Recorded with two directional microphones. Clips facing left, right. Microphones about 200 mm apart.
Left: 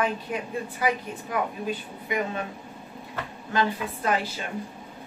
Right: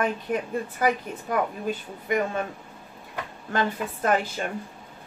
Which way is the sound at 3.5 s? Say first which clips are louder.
Even; 50° right (ahead or behind).